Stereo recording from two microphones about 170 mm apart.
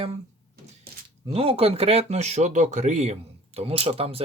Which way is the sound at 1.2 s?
35° right (ahead or behind).